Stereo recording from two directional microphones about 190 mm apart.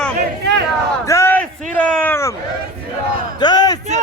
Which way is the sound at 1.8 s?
10° left (ahead or behind).